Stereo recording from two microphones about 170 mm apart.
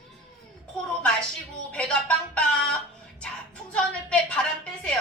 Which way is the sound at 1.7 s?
5° left (ahead or behind).